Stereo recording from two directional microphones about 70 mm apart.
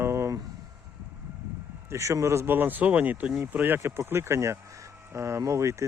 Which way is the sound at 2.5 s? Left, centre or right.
Right.